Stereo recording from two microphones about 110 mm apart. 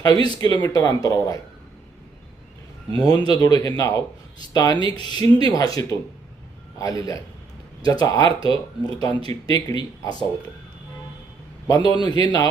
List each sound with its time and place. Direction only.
0.0 s a man's voice: 35° left (ahead or behind)
2.9 s a man's voice: 40° left (ahead or behind)
11.7 s a man's voice: 35° left (ahead or behind)